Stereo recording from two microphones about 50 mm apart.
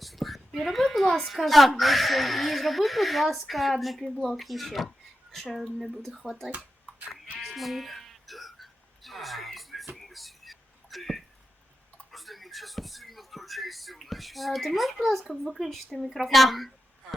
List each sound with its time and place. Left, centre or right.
0.0 s a woman's voice: centre
7.1 s music: centre
12.1 s a sound: centre